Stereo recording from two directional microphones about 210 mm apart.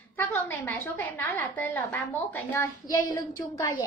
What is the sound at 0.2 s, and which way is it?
A child's voice, 10° left (ahead or behind).